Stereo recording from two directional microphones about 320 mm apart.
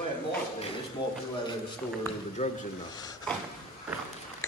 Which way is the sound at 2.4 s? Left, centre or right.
Centre.